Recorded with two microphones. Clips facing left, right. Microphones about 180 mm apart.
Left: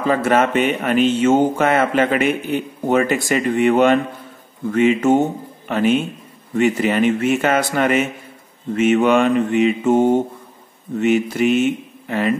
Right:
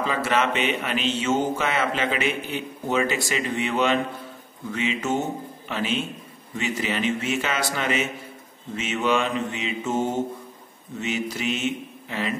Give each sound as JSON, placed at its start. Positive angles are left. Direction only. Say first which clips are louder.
{"t": 0.0, "sound": "speech", "louder": "left 7 dB", "side_deg": 50}
{"t": 8.7, "sound": "mantra", "louder": "left 10 dB", "side_deg": 55}